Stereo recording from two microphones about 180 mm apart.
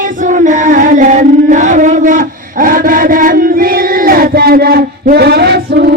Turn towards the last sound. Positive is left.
turn(degrees=-65)  # may be behind; listen again after turning